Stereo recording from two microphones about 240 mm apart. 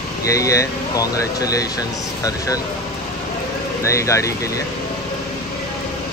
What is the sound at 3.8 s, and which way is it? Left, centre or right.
Speech, centre.